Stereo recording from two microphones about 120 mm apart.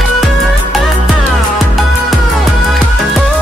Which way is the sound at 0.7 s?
Centre (ahead or behind).